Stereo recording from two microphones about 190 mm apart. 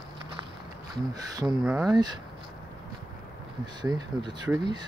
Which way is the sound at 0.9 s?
20° right (ahead or behind).